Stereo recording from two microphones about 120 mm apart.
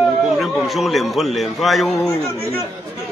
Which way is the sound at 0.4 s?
Centre (ahead or behind).